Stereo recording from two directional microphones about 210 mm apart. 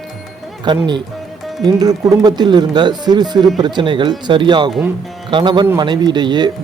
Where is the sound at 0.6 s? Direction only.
20° right (ahead or behind).